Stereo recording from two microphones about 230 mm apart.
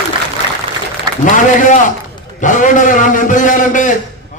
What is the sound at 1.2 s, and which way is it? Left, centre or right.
A man's voice, left.